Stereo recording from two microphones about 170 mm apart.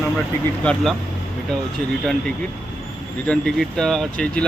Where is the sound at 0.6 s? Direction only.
Centre (ahead or behind).